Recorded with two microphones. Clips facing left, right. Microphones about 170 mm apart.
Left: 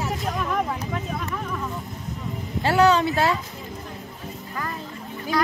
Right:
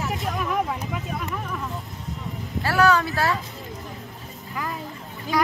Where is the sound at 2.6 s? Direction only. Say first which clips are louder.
Left 2 dB; 20° left (ahead or behind).